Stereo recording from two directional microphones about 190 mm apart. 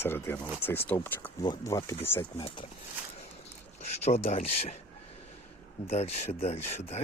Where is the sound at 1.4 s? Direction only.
20° left (ahead or behind).